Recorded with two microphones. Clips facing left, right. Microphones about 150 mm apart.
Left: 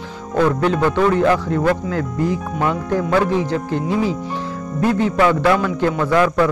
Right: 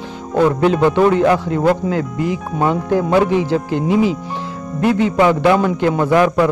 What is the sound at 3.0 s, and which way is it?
Speech, 25° right (ahead or behind).